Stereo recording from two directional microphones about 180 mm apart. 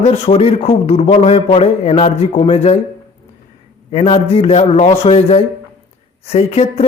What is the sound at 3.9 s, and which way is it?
A man's voice, 30° left (ahead or behind).